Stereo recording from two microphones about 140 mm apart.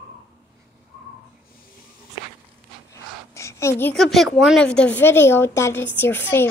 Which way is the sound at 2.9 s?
20° left (ahead or behind).